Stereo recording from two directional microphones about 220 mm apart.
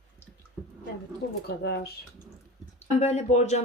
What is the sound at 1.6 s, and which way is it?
Speech, 45° left (ahead or behind).